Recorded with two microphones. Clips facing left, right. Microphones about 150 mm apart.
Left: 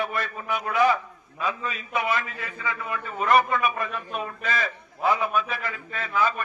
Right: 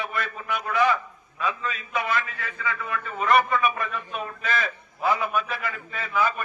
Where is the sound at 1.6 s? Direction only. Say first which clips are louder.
Left 1 dB; 20° left (ahead or behind).